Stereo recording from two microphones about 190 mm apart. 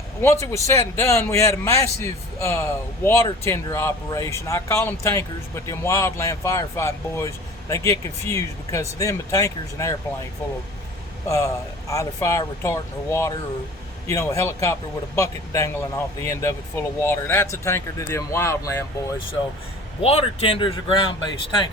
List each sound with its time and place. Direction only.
0.2 s a man's voice: 15° left (ahead or behind)
11.3 s a man's voice: 15° left (ahead or behind)
20.0 s speech: 30° left (ahead or behind)